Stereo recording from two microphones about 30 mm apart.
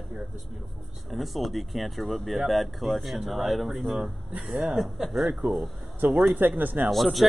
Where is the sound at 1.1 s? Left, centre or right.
Centre.